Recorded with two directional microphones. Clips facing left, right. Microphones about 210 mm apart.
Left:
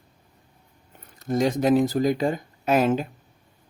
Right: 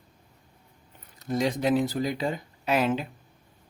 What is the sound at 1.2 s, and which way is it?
Speech, 45° left (ahead or behind).